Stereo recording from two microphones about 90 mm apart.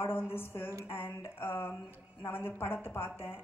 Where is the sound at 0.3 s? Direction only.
25° left (ahead or behind).